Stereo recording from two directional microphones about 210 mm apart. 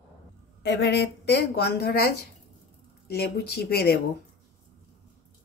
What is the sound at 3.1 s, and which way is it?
Speech, 50° left (ahead or behind).